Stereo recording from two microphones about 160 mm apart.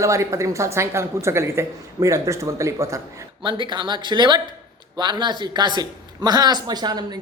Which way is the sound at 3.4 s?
30° right (ahead or behind).